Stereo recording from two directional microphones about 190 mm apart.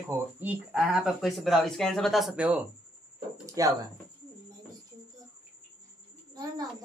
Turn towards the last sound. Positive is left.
turn(degrees=-20)  # may be behind; listen again after turning